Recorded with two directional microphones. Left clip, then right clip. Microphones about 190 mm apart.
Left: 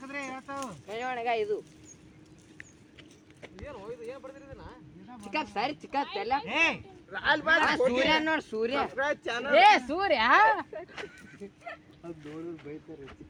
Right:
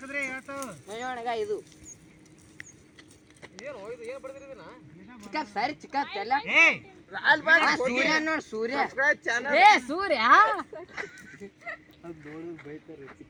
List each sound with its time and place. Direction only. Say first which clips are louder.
0.1 s a sound: right 6 dB; 25° left (ahead or behind)
0.5 s speech: even; 10° left (ahead or behind)
0.9 s speech: left 2 dB; 55° right (ahead or behind)
3.7 s speech: right 3 dB; 25° left (ahead or behind)
5.3 s a woman's voice: right 1 dB; 10° right (ahead or behind)
6.1 s speech: right 3 dB; 30° right (ahead or behind)
6.5 s speech: right 8 dB; 20° left (ahead or behind)
7.1 s a man's voice: right 4 dB; 35° right (ahead or behind)
7.8 s speech: even; 25° right (ahead or behind)
8.2 s speech: even; centre (ahead or behind)
8.4 s speech: right 1 dB; 25° right (ahead or behind)
9.4 s speech: right 1 dB; 45° right (ahead or behind)
10.9 s a sound: right 4 dB; 10° right (ahead or behind)
12.0 s a woman's voice: left 1 dB; 5° right (ahead or behind)